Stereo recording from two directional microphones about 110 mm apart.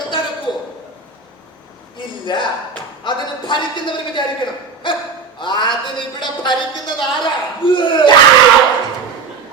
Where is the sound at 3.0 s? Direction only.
45° left (ahead or behind).